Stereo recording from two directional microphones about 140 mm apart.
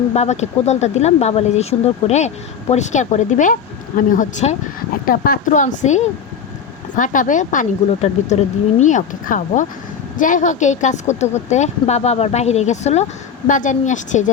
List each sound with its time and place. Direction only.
0.1 s a woman's voice: 50° left (ahead or behind)
5.0 s a woman's voice: 90° left; by 13.1 s 55° left (ahead or behind)
13.5 s a woman's voice: 65° left (ahead or behind)